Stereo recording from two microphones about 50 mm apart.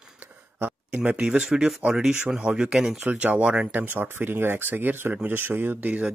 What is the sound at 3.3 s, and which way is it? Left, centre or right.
Speech, centre.